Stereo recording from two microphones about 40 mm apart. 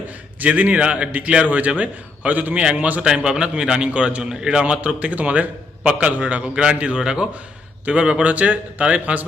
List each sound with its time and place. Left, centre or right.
0.4 s a man's voice: right
3.2 s a man's voice: right
4.6 s a man's voice: right